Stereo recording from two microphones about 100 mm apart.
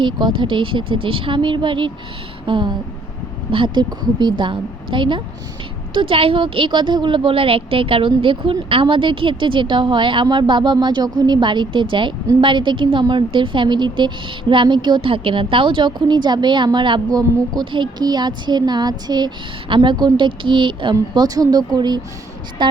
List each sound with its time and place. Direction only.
0.0 s a woman's voice: 50° right (ahead or behind)
3.8 s a woman's voice: 45° right (ahead or behind)
17.2 s a woman's voice: 40° right (ahead or behind)
19.6 s a woman's voice: 55° right (ahead or behind)
21.1 s a woman's voice: 40° right (ahead or behind)